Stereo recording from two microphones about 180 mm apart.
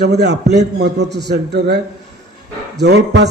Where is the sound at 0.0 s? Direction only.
65° right (ahead or behind).